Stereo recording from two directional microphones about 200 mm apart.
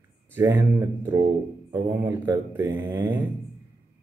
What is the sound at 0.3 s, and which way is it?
Speech, 10° right (ahead or behind).